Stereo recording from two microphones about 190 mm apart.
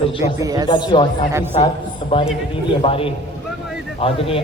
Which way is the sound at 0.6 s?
25° left (ahead or behind).